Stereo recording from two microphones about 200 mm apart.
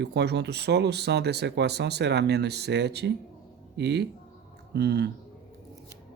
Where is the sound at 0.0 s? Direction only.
55° right (ahead or behind).